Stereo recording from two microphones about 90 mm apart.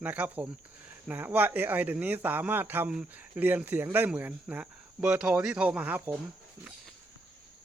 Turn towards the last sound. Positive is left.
turn(degrees=-20)  # may be behind; listen again after turning